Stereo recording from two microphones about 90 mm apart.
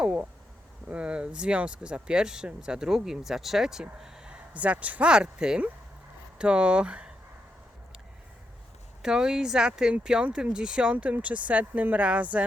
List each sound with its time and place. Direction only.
0.0 s speech: 15° right (ahead or behind)
9.0 s speech: 5° right (ahead or behind)